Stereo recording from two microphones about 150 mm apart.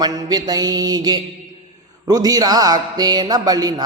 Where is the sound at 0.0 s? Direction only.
25° right (ahead or behind).